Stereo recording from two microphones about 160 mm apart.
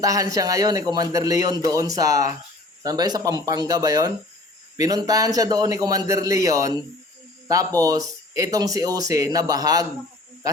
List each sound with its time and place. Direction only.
0.0 s speech: 20° right (ahead or behind)